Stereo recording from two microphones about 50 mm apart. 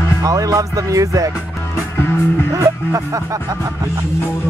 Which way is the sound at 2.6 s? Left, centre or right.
Right.